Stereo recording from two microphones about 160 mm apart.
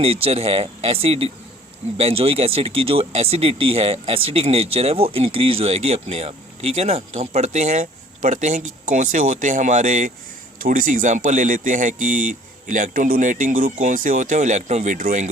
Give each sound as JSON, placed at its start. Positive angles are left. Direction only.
{"t": 0.0, "sound": "speech", "side_deg": -35}